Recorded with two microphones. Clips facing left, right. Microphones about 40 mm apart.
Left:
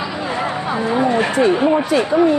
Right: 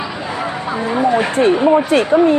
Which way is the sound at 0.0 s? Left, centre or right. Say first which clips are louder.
Left 1 dB; centre.